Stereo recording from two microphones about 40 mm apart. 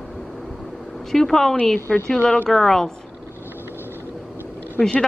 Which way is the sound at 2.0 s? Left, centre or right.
Left.